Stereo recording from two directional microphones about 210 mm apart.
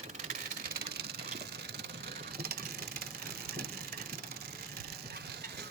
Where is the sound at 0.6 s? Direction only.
45° right (ahead or behind).